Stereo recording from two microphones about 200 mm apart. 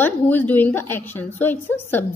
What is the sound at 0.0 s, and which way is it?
A woman's voice, 10° left (ahead or behind).